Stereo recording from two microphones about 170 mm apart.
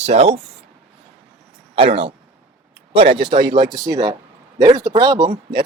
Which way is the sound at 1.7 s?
35° right (ahead or behind).